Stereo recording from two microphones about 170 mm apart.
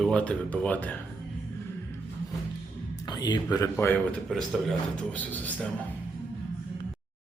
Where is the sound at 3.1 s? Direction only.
25° left (ahead or behind).